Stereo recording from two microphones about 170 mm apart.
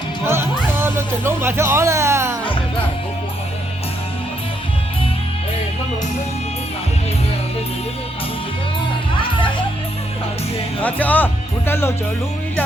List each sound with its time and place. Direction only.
0.7 s music: 15° right (ahead or behind)
10.8 s speech: 10° left (ahead or behind)